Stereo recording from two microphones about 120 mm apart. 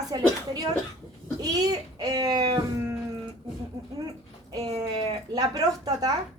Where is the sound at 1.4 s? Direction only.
30° right (ahead or behind).